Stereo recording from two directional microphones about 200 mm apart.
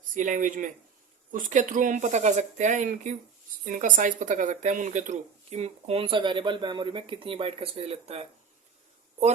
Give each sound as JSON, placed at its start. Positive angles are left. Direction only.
{"t": 0.1, "sound": "speech", "side_deg": -40}